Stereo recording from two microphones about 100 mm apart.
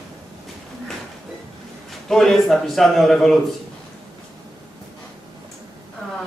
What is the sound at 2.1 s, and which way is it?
A man's voice, centre (ahead or behind).